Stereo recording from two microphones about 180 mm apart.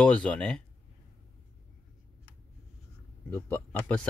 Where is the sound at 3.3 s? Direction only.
10° left (ahead or behind).